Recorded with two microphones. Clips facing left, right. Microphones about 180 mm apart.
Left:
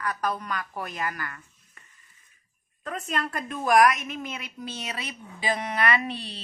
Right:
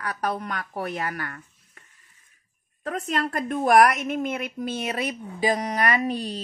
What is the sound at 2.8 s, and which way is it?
A woman's voice, 65° right (ahead or behind).